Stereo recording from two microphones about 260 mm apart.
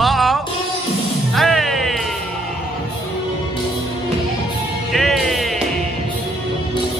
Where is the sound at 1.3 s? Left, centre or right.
Centre.